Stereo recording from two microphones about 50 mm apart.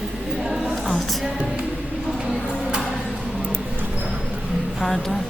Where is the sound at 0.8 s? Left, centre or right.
Centre.